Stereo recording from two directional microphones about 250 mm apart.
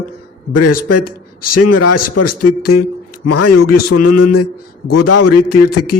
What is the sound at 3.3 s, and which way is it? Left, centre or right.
A man's voice, left.